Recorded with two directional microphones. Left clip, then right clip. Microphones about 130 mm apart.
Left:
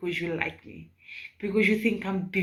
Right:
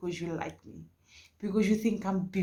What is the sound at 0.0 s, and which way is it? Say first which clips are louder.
Speech: left 6 dB; 35° right (ahead or behind).